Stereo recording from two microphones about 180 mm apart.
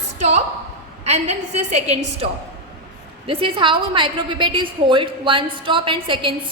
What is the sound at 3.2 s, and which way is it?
A woman's voice, 30° right (ahead or behind).